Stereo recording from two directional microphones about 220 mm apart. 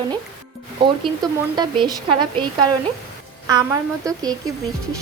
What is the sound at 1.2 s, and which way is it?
Speech, 20° right (ahead or behind).